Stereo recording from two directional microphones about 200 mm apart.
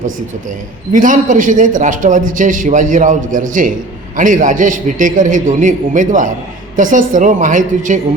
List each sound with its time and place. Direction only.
0.9 s a man's voice: 40° right (ahead or behind)